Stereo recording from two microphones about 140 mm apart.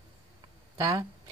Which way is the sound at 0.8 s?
25° right (ahead or behind).